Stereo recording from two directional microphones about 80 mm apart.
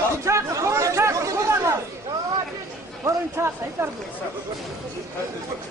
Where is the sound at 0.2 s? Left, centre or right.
Right.